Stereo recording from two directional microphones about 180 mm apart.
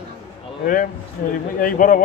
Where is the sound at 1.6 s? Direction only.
50° left (ahead or behind).